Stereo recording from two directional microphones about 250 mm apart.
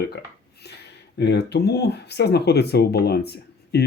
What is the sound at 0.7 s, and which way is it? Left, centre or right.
Speech, left.